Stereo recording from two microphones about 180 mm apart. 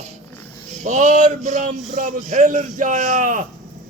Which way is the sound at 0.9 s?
40° right (ahead or behind).